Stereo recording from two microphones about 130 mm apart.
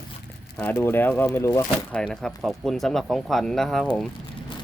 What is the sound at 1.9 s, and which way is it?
Speech, 5° left (ahead or behind).